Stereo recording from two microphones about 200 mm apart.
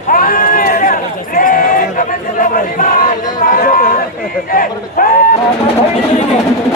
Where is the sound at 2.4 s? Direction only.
45° left (ahead or behind).